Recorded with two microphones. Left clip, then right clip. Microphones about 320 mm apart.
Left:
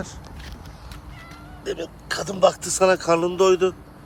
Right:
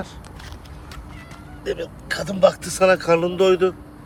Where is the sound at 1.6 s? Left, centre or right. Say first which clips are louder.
Right 3 dB; centre.